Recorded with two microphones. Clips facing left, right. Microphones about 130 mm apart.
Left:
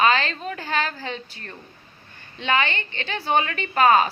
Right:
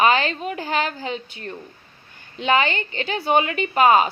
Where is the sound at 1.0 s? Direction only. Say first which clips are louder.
Right 3 dB; 35° left (ahead or behind).